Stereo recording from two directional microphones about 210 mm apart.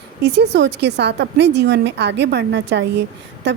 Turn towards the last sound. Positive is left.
turn(degrees=-55)  # may be behind; listen again after turning